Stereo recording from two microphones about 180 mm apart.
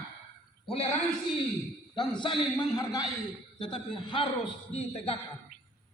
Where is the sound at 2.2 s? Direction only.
25° left (ahead or behind).